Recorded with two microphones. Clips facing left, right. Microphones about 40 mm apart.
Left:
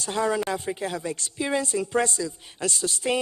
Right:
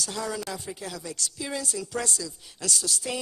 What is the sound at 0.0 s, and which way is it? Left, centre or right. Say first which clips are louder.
A woman's voice: left 7 dB; left.